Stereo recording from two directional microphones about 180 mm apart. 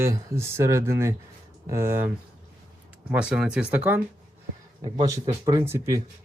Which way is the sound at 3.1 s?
5° right (ahead or behind).